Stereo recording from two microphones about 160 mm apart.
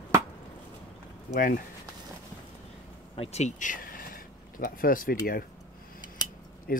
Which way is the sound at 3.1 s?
40° left (ahead or behind).